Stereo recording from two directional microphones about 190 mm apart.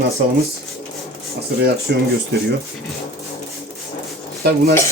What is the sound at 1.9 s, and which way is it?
Speech, 60° right (ahead or behind).